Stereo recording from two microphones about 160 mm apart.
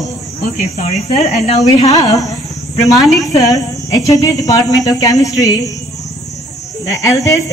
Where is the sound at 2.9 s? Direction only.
Centre (ahead or behind).